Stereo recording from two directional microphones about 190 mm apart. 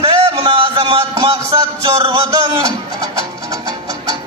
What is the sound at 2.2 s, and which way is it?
Music, 15° right (ahead or behind).